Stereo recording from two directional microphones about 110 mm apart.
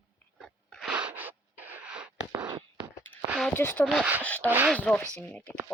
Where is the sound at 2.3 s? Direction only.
40° right (ahead or behind).